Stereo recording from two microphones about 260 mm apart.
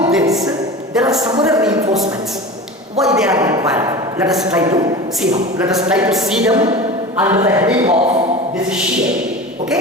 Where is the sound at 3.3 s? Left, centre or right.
Centre.